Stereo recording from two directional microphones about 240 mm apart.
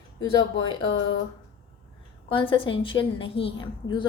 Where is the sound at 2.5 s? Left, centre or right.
Left.